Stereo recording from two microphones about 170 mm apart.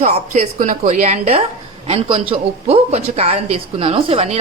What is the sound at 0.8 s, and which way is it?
A woman's voice, 40° right (ahead or behind).